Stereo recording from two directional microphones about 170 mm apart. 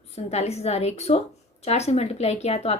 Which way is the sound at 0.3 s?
40° left (ahead or behind).